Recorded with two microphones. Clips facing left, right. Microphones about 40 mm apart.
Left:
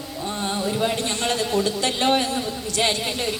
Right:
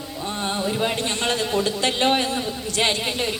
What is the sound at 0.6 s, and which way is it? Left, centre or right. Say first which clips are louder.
Speech: left 1 dB; centre.